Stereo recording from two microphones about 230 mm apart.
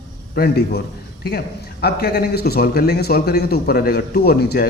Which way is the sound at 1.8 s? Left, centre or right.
Left.